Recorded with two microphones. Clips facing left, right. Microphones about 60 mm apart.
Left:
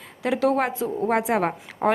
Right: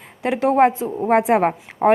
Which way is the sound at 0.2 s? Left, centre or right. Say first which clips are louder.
Right 6 dB; right.